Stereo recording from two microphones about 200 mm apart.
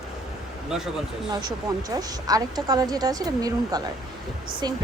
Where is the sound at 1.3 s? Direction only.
20° right (ahead or behind).